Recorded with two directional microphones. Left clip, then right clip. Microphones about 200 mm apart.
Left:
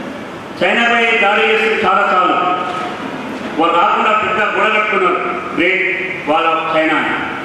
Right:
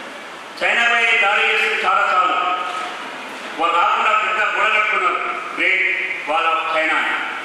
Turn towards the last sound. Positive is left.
turn(degrees=15)  # may be behind; listen again after turning